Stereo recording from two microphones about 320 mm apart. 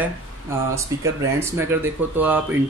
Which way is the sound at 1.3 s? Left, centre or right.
Centre.